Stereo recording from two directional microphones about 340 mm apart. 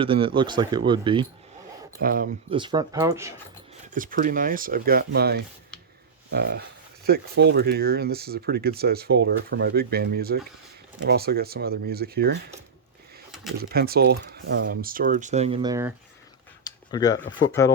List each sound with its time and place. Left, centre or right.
0.0 s speech: centre
2.0 s speech: right; by 3.3 s centre
3.9 s speech: right
13.6 s speech: right; by 15.9 s centre
16.6 s a sound: centre
17.6 s speech: centre